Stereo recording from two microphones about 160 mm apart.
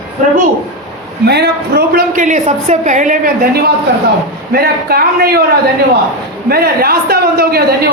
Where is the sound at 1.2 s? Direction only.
90° right; by 3.2 s 50° right (ahead or behind).